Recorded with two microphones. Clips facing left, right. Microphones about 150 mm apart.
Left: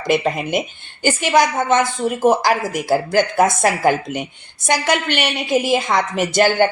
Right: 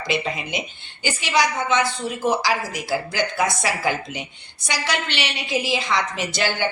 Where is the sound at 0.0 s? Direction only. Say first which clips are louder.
Left 7 dB; 50° left (ahead or behind).